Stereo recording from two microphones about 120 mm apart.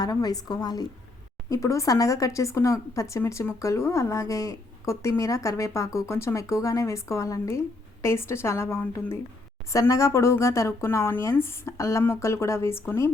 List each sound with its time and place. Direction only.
0.0 s a woman's voice: 30° left (ahead or behind)